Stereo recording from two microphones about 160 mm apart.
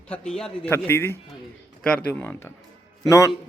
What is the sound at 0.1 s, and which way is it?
A man's voice, 5° left (ahead or behind).